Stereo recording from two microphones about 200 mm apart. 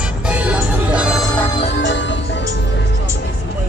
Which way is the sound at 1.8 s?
65° left (ahead or behind).